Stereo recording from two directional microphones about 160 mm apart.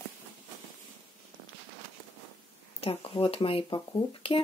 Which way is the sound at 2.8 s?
35° left (ahead or behind).